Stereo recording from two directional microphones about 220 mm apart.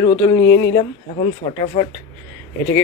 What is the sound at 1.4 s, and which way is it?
Speech, 30° left (ahead or behind).